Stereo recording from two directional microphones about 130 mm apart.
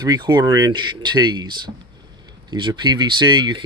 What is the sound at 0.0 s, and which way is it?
Speech, 30° right (ahead or behind).